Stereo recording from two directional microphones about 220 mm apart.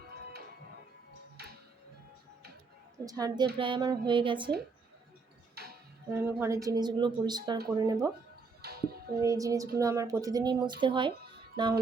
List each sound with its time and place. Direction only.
3.1 s speech: 15° right (ahead or behind)
3.6 s a sound: 20° right (ahead or behind)
6.1 s speech: 10° right (ahead or behind)
8.6 s music: 45° right (ahead or behind)
9.2 s speech: 15° right (ahead or behind)
11.5 s a sound: 20° right (ahead or behind)